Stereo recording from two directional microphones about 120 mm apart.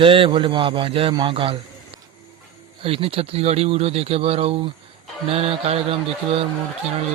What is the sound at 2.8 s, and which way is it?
Speech, 50° right (ahead or behind).